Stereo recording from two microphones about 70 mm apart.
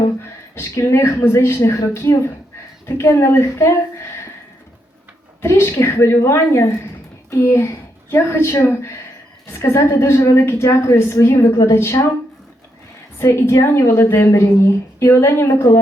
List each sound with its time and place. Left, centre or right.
0.5 s a woman's voice: left
5.4 s a woman's voice: left
13.1 s a woman's voice: left